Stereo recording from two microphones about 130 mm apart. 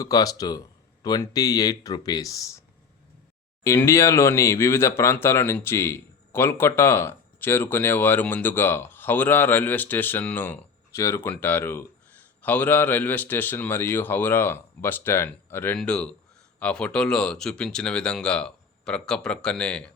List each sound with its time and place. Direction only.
0.0 s speech: 30° left (ahead or behind)
3.6 s speech: 20° left (ahead or behind)